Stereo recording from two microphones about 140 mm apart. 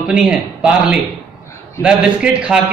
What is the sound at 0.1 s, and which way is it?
A man's voice, 5° right (ahead or behind).